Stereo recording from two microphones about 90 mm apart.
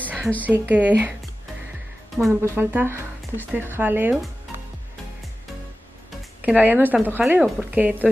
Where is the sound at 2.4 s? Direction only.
25° right (ahead or behind).